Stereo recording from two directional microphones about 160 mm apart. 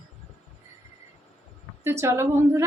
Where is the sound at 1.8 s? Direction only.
15° right (ahead or behind).